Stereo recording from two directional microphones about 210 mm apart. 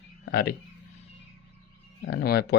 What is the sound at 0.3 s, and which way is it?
Speech, 50° left (ahead or behind).